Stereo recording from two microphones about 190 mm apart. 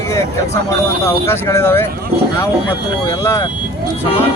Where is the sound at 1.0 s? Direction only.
15° left (ahead or behind).